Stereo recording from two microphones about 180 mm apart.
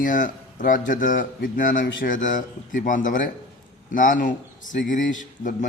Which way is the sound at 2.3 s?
45° left (ahead or behind).